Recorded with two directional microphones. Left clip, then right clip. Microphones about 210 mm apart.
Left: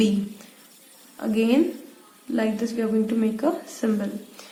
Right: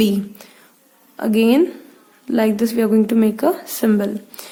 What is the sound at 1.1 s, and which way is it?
A woman's voice, 55° right (ahead or behind).